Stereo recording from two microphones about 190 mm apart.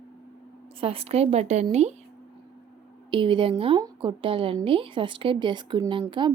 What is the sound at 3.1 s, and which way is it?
Speech, 25° right (ahead or behind).